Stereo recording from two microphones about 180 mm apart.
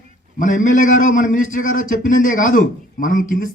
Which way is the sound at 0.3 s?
45° left (ahead or behind).